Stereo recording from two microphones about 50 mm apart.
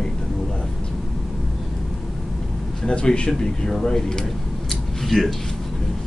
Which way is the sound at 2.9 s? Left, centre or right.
Centre.